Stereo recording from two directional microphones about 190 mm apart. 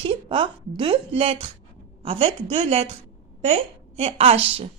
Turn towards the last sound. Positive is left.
turn(degrees=-30)  # may be behind; listen again after turning